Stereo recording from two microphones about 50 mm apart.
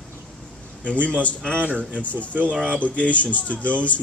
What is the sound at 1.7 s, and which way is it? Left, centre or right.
Speech, right.